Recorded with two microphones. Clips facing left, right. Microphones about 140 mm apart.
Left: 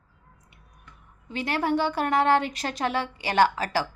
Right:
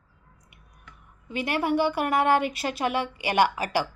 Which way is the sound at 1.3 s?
10° right (ahead or behind).